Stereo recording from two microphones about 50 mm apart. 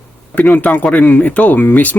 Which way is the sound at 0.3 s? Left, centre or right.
Left.